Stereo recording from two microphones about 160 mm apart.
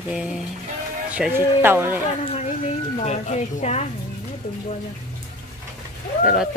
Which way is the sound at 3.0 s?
45° left (ahead or behind).